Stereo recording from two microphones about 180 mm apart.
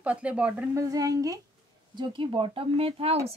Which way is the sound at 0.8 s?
20° right (ahead or behind).